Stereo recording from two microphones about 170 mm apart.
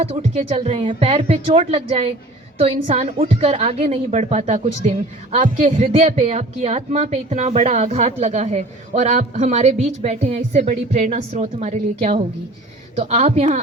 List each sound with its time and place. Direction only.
0.0 s a woman's voice: 35° right (ahead or behind)